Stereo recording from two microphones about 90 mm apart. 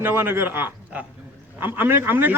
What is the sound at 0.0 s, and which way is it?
A man's voice, 25° right (ahead or behind).